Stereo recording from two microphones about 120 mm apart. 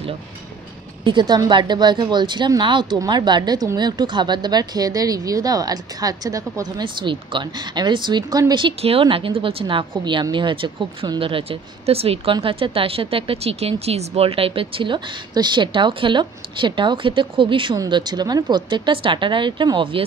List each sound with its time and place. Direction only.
1.0 s a woman's voice: 40° right (ahead or behind)
6.8 s a woman's voice: 40° right (ahead or behind)